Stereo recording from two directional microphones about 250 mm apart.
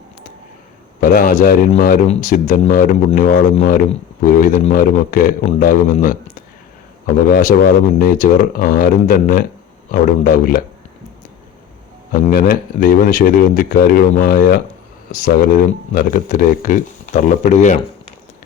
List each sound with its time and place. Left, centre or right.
1.0 s speech: left
7.3 s speech: left
12.1 s speech: left